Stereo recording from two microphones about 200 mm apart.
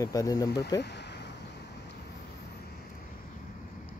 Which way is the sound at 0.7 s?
60° left (ahead or behind).